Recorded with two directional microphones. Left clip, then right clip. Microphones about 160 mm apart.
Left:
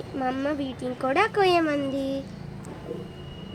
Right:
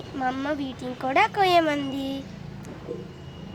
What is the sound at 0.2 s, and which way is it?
Speech, 15° right (ahead or behind).